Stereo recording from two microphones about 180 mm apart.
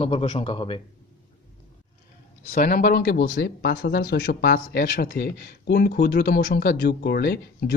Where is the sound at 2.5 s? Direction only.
55° left (ahead or behind).